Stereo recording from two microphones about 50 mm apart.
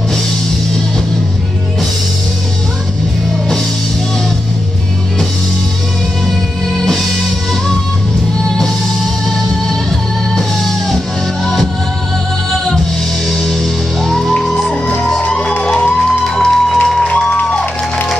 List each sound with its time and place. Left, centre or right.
6.8 s music: centre
9.7 s music: centre
13.3 s music: centre
17.2 s music: centre